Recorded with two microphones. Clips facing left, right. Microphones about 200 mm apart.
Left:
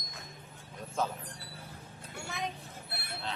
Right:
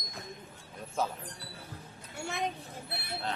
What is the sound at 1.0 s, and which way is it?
Speech, 10° right (ahead or behind).